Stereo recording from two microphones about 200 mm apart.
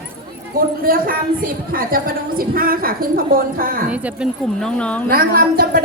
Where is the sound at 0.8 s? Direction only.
45° right (ahead or behind).